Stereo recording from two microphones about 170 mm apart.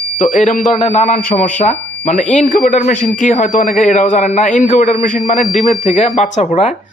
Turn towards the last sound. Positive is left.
turn(degrees=40)  # may be behind; listen again after turning